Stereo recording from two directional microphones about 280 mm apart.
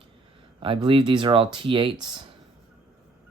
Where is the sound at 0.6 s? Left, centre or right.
Centre.